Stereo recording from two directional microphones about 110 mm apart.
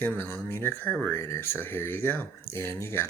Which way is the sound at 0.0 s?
15° left (ahead or behind).